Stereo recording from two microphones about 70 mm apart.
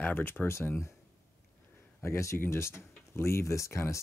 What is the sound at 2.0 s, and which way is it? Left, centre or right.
Speech, left.